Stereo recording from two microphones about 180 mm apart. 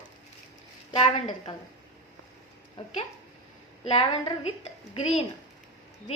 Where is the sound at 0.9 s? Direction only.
35° left (ahead or behind).